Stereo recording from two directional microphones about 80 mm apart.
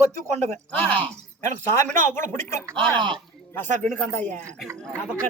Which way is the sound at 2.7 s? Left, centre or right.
Right.